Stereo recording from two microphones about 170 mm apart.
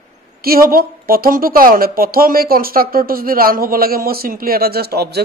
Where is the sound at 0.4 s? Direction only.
60° right (ahead or behind).